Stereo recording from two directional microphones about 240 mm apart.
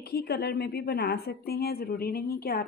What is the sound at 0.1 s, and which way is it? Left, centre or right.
A woman's voice, left.